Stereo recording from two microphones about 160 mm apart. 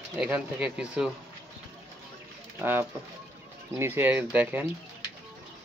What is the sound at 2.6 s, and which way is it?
Speech, 15° right (ahead or behind).